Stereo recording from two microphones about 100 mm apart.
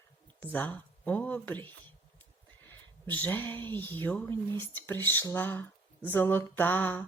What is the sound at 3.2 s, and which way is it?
Speech, 20° left (ahead or behind).